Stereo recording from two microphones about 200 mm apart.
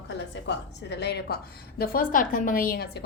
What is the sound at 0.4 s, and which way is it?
A woman's voice, 60° left (ahead or behind).